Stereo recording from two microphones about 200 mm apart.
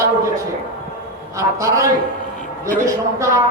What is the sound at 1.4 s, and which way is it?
A man's voice, 15° right (ahead or behind).